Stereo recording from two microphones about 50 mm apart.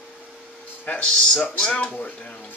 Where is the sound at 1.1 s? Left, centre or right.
Centre.